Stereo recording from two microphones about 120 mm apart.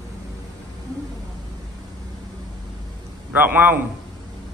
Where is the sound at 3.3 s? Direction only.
15° right (ahead or behind).